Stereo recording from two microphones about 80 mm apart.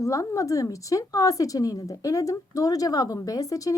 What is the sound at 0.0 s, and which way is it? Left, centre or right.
A woman's voice, left.